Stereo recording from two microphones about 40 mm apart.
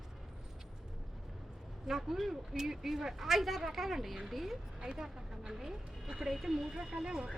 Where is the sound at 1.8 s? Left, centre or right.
Centre.